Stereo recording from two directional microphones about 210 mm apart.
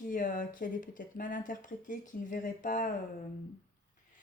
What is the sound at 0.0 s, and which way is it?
Speech, 40° left (ahead or behind).